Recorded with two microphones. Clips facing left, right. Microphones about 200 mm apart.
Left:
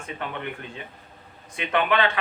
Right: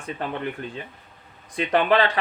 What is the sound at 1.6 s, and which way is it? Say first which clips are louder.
Speech: right 4 dB; 35° right (ahead or behind).